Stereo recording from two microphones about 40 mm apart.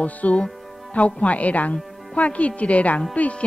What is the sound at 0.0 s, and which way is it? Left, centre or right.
Speech, left.